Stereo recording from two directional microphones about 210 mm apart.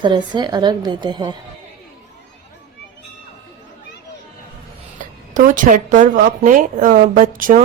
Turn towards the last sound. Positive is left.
turn(degrees=-40)  # may be behind; listen again after turning